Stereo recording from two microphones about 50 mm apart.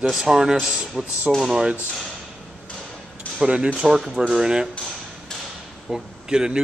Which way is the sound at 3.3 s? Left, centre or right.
Centre.